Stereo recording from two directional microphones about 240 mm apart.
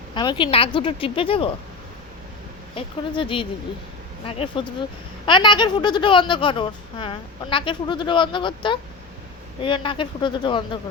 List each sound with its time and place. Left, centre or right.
0.1 s speech: centre
2.7 s speech: left